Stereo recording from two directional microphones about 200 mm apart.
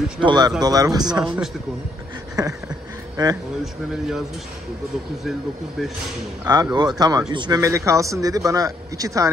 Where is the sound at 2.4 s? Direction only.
20° right (ahead or behind).